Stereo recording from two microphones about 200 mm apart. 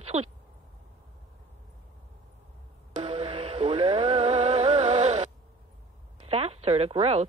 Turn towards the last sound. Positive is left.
turn(degrees=-30)  # may be behind; listen again after turning